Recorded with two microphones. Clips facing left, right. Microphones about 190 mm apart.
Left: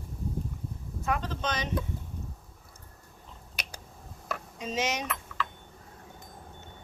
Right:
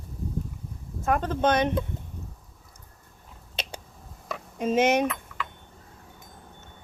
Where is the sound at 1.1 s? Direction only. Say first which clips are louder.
Right 8 dB; 50° right (ahead or behind).